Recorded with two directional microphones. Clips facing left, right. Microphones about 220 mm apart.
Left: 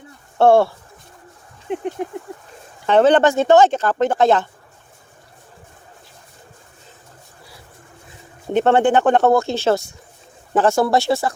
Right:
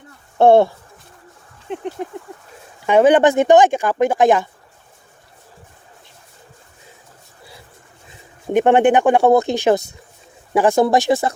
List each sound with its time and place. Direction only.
0.3 s speech: 20° right (ahead or behind)
1.7 s a sound: 15° left (ahead or behind)
2.8 s speech: 10° right (ahead or behind)
8.5 s speech: 15° right (ahead or behind)